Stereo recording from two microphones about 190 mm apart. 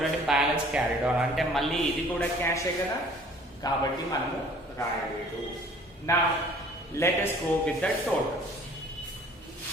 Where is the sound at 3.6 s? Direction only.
20° left (ahead or behind).